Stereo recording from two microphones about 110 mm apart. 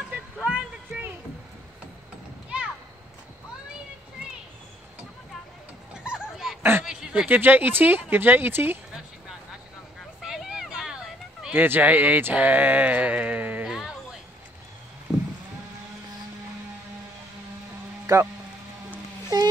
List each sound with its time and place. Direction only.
0.1 s a sound: 10° right (ahead or behind)
6.0 s dog: 5° right (ahead or behind)
6.8 s speech: 5° right (ahead or behind)
8.9 s a sound: 5° right (ahead or behind)
10.2 s vehicle: 5° right (ahead or behind)
11.5 s speech: 20° right (ahead or behind)
13.7 s a sound: 5° right (ahead or behind)
15.1 s sheep: centre (ahead or behind)
18.0 s speech: 25° right (ahead or behind)